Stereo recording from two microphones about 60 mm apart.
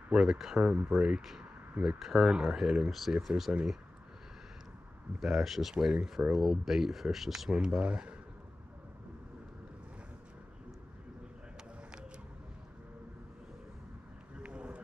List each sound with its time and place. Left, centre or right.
0.1 s speech: centre
0.6 s speech: centre
5.2 s speech: centre
14.4 s run: centre